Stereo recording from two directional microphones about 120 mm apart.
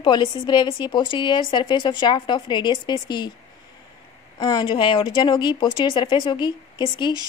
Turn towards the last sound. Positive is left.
turn(degrees=40)  # may be behind; listen again after turning